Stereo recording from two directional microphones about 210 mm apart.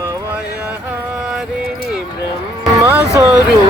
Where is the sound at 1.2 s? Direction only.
5° right (ahead or behind).